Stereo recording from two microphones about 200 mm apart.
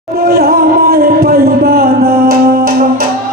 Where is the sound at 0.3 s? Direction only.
50° right (ahead or behind).